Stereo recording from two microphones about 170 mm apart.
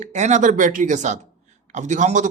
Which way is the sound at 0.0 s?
45° right (ahead or behind).